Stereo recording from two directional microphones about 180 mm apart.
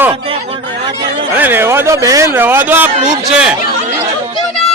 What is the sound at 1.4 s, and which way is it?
A man's voice, 10° right (ahead or behind).